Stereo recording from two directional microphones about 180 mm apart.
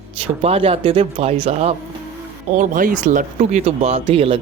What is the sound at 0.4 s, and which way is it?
Speech, 30° right (ahead or behind).